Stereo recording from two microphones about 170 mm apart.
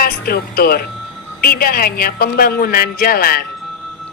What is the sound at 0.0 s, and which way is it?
A woman's voice, 60° left (ahead or behind).